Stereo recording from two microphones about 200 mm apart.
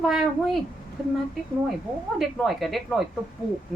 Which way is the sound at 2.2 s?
Centre (ahead or behind).